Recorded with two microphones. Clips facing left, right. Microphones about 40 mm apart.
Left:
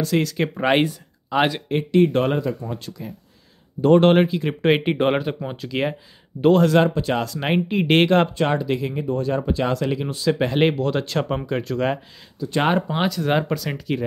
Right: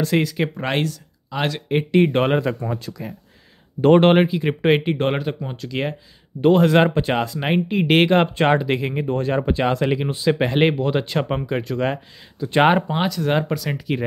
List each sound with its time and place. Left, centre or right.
0.2 s speech: centre
0.6 s speech: centre
1.9 s speech: right
4.0 s speech: centre
4.8 s speech: centre
6.5 s speech: right
7.3 s speech: centre
8.4 s speech: right; by 12.0 s centre
12.4 s speech: right
12.9 s speech: centre